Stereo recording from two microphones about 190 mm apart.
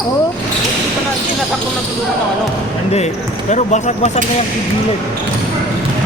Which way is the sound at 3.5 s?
40° left (ahead or behind).